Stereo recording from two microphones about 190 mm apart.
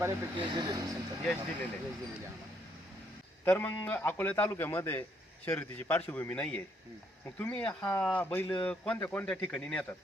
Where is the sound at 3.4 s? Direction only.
10° left (ahead or behind).